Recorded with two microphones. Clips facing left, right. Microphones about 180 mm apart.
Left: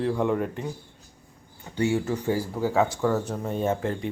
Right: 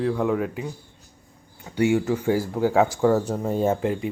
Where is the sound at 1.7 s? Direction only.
15° right (ahead or behind).